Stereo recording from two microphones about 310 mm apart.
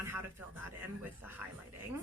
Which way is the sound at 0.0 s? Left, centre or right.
Centre.